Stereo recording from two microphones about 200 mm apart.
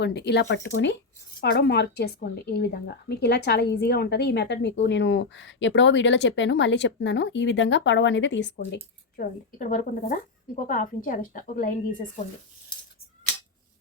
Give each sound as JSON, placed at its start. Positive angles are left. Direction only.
{"t": 0.0, "sound": "a woman's voice", "side_deg": 55}
{"t": 1.4, "sound": "a woman's voice", "side_deg": 55}